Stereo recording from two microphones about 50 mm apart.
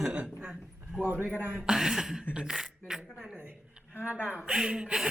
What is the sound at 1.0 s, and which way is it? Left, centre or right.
Speech, right.